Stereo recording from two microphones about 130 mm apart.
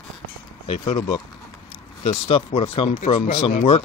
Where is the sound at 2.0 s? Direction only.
45° left (ahead or behind).